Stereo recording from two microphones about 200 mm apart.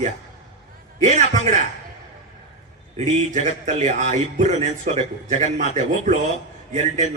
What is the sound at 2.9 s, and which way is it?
A man's voice, 35° right (ahead or behind).